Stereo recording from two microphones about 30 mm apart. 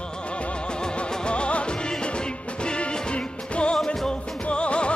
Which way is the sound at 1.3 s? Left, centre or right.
Left.